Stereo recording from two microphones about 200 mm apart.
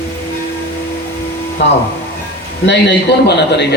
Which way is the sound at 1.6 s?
60° left (ahead or behind).